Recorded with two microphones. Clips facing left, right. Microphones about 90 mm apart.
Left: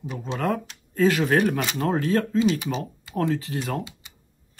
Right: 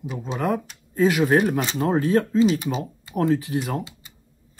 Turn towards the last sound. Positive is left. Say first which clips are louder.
# right 4 dB
turn(degrees=-20)  # may be behind; listen again after turning